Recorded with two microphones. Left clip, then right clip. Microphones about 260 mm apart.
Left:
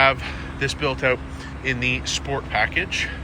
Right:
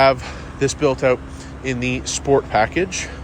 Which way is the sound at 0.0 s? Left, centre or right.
Right.